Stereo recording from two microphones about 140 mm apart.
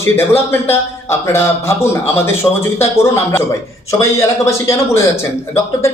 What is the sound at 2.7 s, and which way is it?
Speech, 20° left (ahead or behind).